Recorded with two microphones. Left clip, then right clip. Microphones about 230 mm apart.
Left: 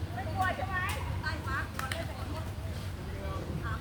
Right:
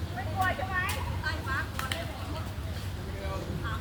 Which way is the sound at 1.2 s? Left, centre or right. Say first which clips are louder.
Right 3 dB; centre.